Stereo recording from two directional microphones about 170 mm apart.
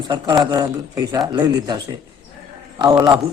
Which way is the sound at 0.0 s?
25° right (ahead or behind).